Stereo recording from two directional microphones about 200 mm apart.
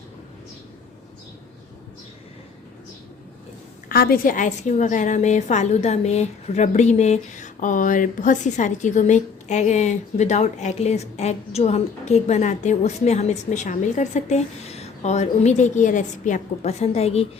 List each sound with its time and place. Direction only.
3.8 s a woman's voice: 50° left (ahead or behind); by 17.2 s 30° left (ahead or behind)